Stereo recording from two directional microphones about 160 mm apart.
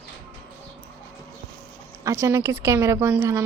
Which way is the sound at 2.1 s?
15° right (ahead or behind).